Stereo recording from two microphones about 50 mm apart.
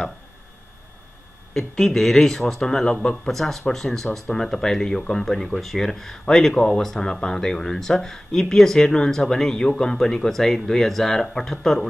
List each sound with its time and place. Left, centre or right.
1.5 s speech: centre